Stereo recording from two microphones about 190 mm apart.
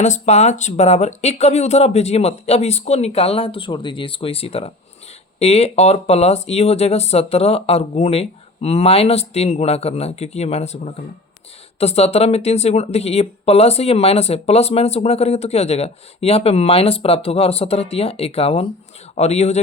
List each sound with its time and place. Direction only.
0.0 s speech: 35° left (ahead or behind)